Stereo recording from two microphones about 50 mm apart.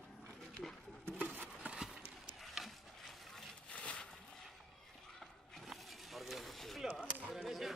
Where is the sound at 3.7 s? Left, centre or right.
Left.